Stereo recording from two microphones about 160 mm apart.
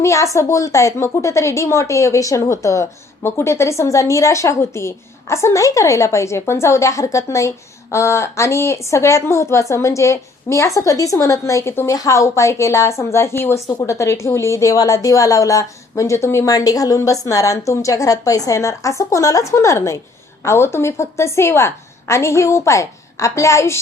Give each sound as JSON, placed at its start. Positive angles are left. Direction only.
{"t": 0.0, "sound": "a woman's voice", "side_deg": 20}